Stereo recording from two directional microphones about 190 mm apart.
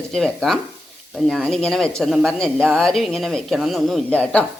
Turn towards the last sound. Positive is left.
turn(degrees=5)  # may be behind; listen again after turning